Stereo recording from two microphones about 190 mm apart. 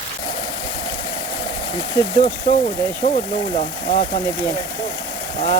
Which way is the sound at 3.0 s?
35° left (ahead or behind).